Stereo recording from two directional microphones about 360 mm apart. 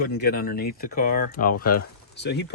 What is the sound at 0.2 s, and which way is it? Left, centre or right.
Speech, left.